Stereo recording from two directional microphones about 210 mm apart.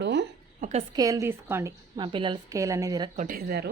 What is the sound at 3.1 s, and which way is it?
Speech, 40° right (ahead or behind).